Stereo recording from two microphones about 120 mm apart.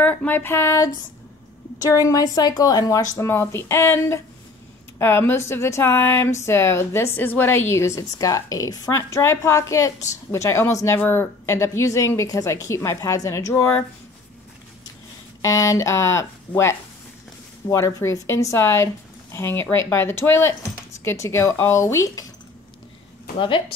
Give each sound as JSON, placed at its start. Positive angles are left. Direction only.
{"t": 0.0, "sound": "a sound", "side_deg": 15}
{"t": 1.8, "sound": "a woman's voice", "side_deg": 25}
{"t": 15.4, "sound": "a woman's voice", "side_deg": 25}
{"t": 23.3, "sound": "a woman's voice", "side_deg": 45}